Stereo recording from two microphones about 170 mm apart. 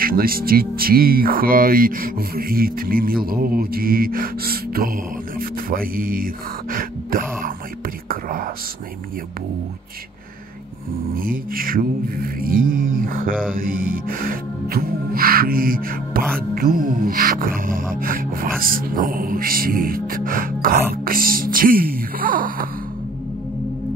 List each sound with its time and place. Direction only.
0.0 s music: 60° right (ahead or behind)
5.4 s speech: 55° right (ahead or behind)
8.1 s whispering: 55° right (ahead or behind)
11.1 s music: 55° right (ahead or behind)